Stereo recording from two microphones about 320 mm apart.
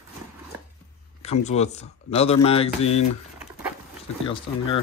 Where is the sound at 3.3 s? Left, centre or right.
Centre.